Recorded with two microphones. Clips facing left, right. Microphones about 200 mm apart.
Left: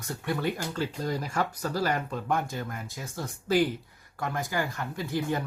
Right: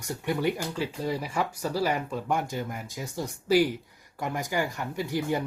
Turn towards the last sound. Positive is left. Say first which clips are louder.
# right 2 dB
turn(degrees=-15)  # may be behind; listen again after turning